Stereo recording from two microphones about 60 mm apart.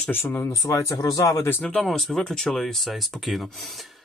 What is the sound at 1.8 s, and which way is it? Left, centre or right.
Speech, centre.